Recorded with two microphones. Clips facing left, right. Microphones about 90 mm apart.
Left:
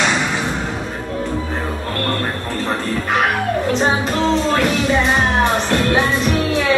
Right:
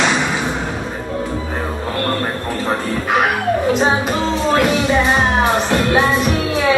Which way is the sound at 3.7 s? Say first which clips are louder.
Right 1 dB; centre (ahead or behind).